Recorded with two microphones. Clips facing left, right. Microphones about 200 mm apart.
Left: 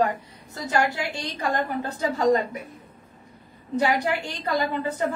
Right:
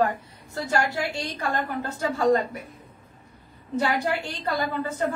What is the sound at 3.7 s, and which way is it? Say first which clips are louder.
Speech: left 2 dB; 15° left (ahead or behind).